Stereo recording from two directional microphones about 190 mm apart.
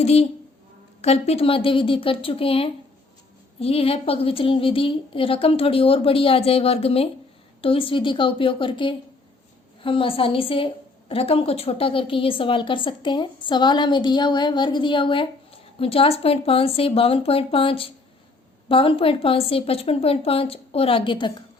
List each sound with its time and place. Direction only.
0.0 s a woman's voice: 30° left (ahead or behind)